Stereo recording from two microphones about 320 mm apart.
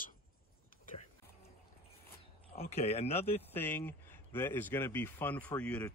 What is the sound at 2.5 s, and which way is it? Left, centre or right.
Speech, centre.